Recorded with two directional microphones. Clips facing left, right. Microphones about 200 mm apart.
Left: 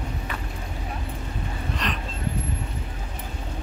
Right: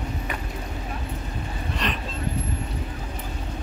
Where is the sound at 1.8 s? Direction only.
Centre (ahead or behind).